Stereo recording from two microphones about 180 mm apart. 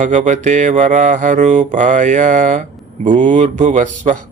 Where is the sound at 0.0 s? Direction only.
45° right (ahead or behind).